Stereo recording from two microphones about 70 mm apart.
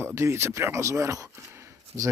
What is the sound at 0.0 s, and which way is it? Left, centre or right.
Speech, right.